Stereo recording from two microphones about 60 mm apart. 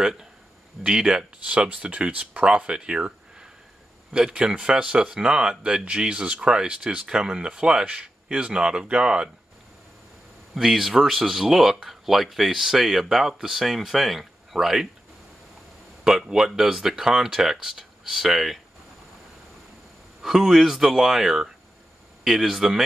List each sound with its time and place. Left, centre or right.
0.0 s speech: centre
10.5 s speech: centre
16.0 s speech: centre
20.2 s speech: centre